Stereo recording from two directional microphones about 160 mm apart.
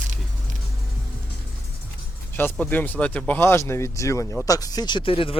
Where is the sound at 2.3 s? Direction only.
10° left (ahead or behind).